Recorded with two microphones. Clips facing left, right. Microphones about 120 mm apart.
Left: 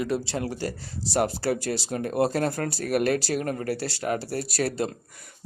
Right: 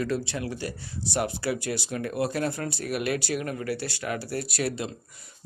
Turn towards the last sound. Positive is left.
turn(degrees=40)  # may be behind; listen again after turning